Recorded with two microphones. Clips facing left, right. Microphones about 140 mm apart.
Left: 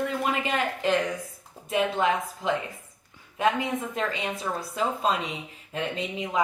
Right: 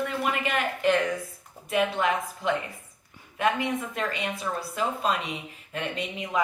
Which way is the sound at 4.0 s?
25° left (ahead or behind).